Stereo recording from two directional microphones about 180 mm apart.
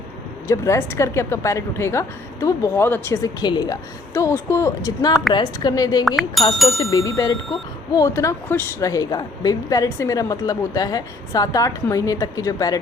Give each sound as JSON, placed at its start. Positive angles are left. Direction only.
{"t": 0.4, "sound": "a woman's voice", "side_deg": 15}
{"t": 6.1, "sound": "speech", "side_deg": 0}
{"t": 6.9, "sound": "speech", "side_deg": 20}